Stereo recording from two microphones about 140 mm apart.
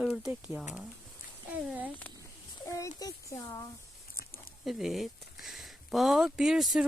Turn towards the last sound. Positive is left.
turn(degrees=0)  # may be behind; listen again after turning